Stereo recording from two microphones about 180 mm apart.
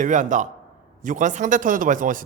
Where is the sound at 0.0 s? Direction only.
45° right (ahead or behind).